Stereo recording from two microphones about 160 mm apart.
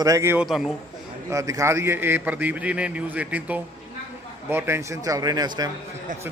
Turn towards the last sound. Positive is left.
turn(degrees=-25)  # may be behind; listen again after turning